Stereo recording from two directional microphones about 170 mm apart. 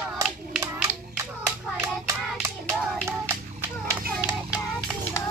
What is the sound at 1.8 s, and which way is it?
Hands, 15° right (ahead or behind).